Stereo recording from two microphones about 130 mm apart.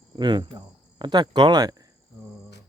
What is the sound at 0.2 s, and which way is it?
Speech, 35° right (ahead or behind).